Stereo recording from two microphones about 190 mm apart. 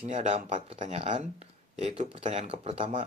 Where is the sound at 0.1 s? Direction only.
40° right (ahead or behind).